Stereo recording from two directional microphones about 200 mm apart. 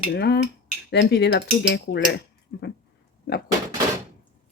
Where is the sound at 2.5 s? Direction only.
50° left (ahead or behind).